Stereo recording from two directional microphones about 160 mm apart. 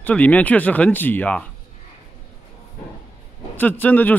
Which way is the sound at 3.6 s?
10° left (ahead or behind).